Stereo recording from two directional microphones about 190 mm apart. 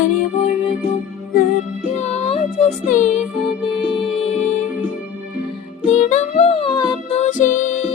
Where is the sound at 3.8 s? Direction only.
25° left (ahead or behind).